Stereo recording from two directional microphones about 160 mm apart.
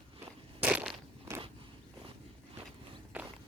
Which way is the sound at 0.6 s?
10° right (ahead or behind).